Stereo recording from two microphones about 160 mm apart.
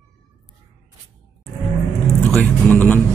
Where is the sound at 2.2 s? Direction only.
10° left (ahead or behind).